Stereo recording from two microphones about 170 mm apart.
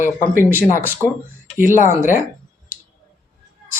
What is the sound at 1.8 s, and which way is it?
Speech, 50° left (ahead or behind).